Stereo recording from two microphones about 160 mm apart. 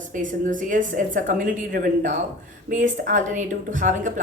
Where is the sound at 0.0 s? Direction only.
55° right (ahead or behind).